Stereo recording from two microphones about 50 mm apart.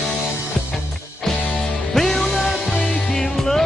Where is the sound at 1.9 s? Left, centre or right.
Centre.